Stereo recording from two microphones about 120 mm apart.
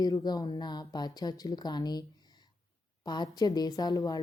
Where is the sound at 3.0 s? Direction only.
35° left (ahead or behind).